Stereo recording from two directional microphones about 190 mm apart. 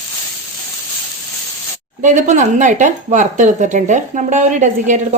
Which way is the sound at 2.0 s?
40° right (ahead or behind).